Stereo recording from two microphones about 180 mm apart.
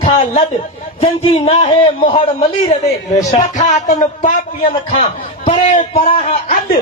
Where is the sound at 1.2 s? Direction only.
30° left (ahead or behind).